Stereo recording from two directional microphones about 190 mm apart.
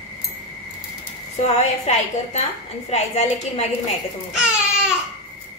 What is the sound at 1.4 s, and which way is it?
A woman's voice, 35° left (ahead or behind).